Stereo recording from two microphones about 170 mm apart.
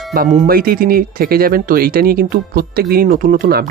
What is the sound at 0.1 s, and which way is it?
Speech, 55° right (ahead or behind).